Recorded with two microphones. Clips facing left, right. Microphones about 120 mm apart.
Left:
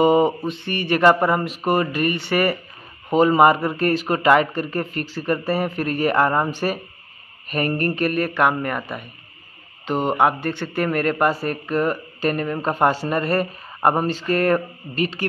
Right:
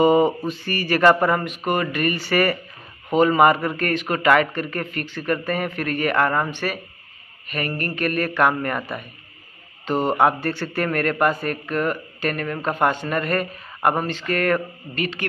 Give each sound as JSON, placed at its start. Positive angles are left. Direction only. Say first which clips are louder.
{"t": 0.0, "sound": "mantra", "louder": "even", "side_deg": 25}
{"t": 0.5, "sound": "a man's voice", "louder": "left 1 dB", "side_deg": 25}
{"t": 1.7, "sound": "a man's voice", "louder": "left 2 dB", "side_deg": 35}
{"t": 8.1, "sound": "a man's voice", "louder": "right 3 dB", "side_deg": 20}
{"t": 9.8, "sound": "a man's voice", "louder": "even", "side_deg": 20}
{"t": 12.9, "sound": "a man's voice", "louder": "left 2 dB", "side_deg": 30}
{"t": 15.0, "sound": "speech", "louder": "left 3 dB", "side_deg": 35}